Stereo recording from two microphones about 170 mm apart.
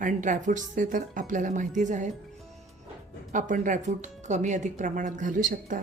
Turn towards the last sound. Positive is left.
turn(degrees=-50)  # may be behind; listen again after turning